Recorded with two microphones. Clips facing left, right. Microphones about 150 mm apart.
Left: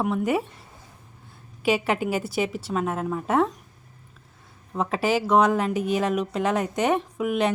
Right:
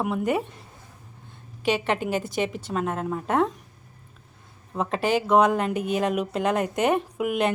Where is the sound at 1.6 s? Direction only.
5° left (ahead or behind).